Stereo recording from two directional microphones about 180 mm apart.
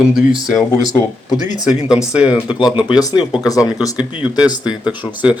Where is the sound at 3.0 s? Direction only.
25° left (ahead or behind).